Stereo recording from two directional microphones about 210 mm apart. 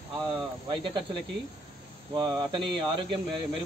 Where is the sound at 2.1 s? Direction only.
20° right (ahead or behind).